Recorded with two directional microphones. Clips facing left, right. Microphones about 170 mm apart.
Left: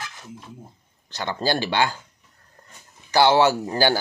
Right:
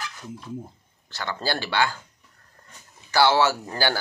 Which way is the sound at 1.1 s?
20° left (ahead or behind).